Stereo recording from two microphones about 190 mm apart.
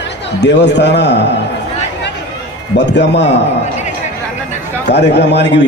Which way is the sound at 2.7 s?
65° left (ahead or behind).